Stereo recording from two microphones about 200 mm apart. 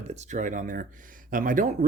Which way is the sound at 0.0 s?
35° right (ahead or behind).